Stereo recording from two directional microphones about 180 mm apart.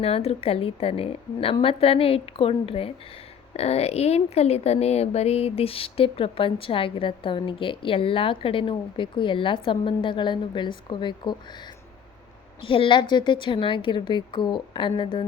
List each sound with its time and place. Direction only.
0.0 s a woman's voice: 35° left (ahead or behind)
12.6 s speech: 30° left (ahead or behind)